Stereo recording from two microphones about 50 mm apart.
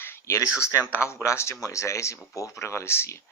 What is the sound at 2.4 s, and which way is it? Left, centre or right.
Speech, left.